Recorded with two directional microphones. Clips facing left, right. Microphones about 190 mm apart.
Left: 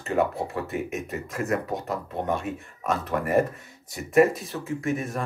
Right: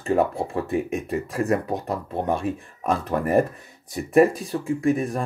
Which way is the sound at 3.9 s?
30° right (ahead or behind).